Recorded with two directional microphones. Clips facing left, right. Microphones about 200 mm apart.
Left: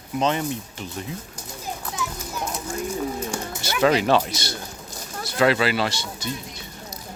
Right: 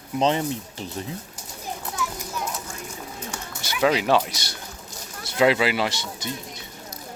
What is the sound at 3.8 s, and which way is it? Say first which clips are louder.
Speech: left 1 dB; 10° right (ahead or behind).